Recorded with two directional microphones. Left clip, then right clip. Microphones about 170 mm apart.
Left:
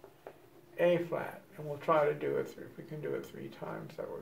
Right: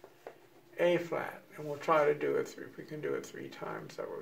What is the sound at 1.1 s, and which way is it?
Speech, 30° right (ahead or behind).